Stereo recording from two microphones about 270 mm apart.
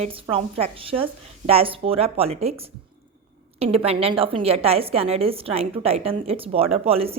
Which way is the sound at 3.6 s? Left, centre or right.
Right.